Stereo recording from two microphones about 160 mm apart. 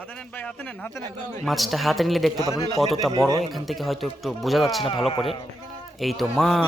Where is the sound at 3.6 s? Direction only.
Centre (ahead or behind).